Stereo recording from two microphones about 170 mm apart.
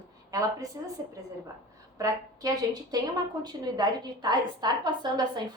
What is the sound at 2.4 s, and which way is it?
A woman's voice, 20° right (ahead or behind).